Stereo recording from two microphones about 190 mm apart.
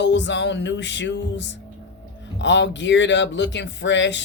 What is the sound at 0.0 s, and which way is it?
Speech, 70° left (ahead or behind).